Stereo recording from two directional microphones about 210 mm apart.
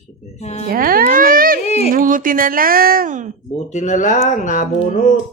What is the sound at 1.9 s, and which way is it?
Speech, 40° right (ahead or behind).